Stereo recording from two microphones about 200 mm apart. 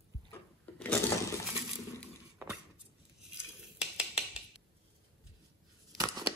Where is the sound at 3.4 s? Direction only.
5° right (ahead or behind).